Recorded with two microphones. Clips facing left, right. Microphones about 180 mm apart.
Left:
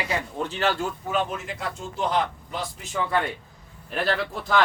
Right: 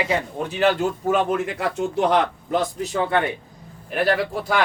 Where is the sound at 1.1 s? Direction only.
55° right (ahead or behind).